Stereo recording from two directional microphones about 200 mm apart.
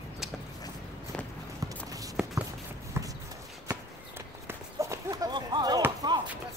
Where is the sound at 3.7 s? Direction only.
10° right (ahead or behind).